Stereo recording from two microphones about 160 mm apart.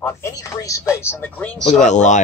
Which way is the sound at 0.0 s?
20° left (ahead or behind).